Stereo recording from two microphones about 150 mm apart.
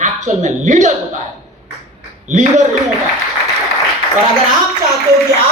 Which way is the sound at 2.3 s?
55° right (ahead or behind).